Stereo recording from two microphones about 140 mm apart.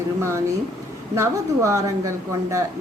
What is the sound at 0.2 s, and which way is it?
A woman's voice, 20° right (ahead or behind).